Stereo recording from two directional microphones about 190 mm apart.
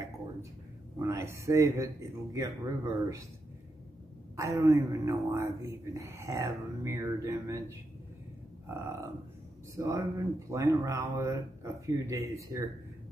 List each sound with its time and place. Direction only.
0.9 s speech: 15° right (ahead or behind)
4.4 s speech: 15° right (ahead or behind)
8.6 s speech: 15° right (ahead or behind)